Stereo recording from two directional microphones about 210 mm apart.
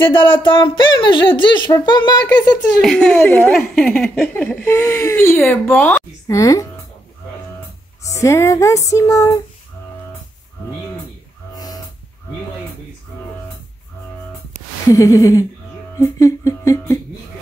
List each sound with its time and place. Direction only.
0.0 s speech: 25° left (ahead or behind)
2.5 s speech: 5° left (ahead or behind)
8.0 s speech: 15° left (ahead or behind)
11.5 s a sound: 20° left (ahead or behind)
14.9 s speech: 15° left (ahead or behind)